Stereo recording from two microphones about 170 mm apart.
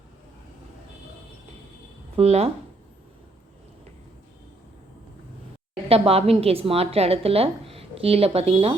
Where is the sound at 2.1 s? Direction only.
35° right (ahead or behind).